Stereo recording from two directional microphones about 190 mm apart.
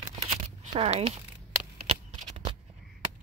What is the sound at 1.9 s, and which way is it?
Shuffling cards, 30° right (ahead or behind).